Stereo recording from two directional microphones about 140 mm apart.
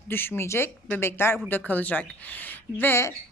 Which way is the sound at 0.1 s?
15° left (ahead or behind).